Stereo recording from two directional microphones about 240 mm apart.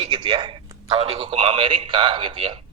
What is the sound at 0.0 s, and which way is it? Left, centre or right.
A man's voice, centre.